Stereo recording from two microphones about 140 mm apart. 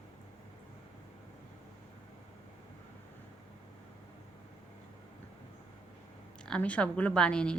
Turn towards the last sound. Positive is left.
turn(degrees=5)  # may be behind; listen again after turning